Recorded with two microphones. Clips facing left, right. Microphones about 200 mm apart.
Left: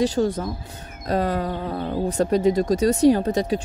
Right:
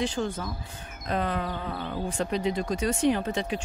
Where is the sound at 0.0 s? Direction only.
40° left (ahead or behind).